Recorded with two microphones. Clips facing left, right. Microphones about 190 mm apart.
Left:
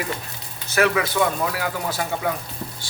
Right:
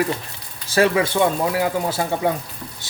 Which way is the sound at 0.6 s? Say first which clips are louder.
Right 3 dB; 30° right (ahead or behind).